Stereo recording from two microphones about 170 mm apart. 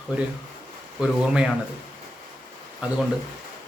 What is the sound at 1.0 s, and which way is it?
Speech, 5° right (ahead or behind).